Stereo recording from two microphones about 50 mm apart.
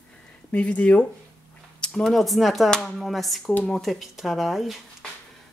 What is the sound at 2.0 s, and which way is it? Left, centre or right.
Speech, centre.